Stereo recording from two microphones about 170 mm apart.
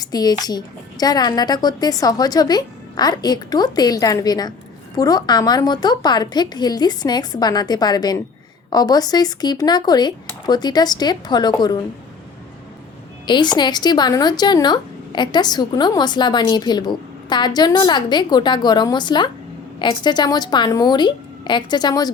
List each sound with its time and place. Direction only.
0.0 s a woman's voice: 25° left (ahead or behind)
13.2 s a woman's voice: 25° left (ahead or behind)